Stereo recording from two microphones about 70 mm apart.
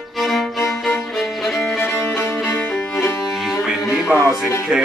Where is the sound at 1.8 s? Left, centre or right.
Left.